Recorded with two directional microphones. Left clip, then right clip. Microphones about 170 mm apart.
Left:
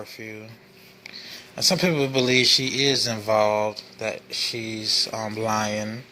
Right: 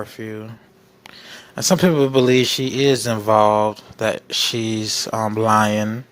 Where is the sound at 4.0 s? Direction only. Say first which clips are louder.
Right 10 dB; 55° right (ahead or behind).